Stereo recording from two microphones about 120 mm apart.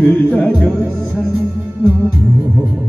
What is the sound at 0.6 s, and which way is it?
Music, 5° left (ahead or behind).